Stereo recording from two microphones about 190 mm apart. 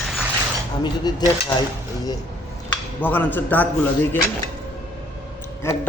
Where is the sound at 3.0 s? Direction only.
10° left (ahead or behind).